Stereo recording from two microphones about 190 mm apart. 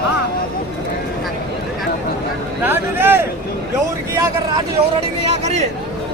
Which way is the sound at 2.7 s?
10° right (ahead or behind).